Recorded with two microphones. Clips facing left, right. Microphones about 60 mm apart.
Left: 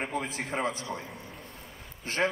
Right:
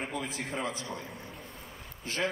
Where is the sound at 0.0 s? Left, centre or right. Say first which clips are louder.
Left 3 dB; left.